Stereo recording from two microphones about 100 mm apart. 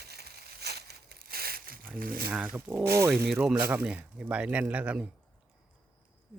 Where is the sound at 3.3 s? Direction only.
5° right (ahead or behind).